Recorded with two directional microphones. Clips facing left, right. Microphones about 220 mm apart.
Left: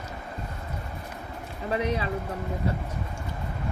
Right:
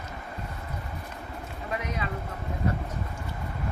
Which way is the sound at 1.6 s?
30° left (ahead or behind).